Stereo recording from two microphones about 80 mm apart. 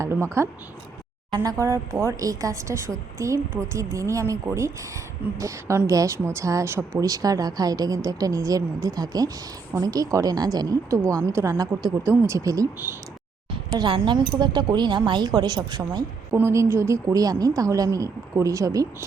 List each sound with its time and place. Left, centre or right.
0.4 s speech: right
1.5 s speech: right
2.1 s speech: right
7.0 s a woman's voice: right
11.0 s a woman's voice: centre
11.3 s speech: right
12.4 s a woman's voice: right
13.5 s a sound: right
14.1 s speech: right
16.3 s speech: right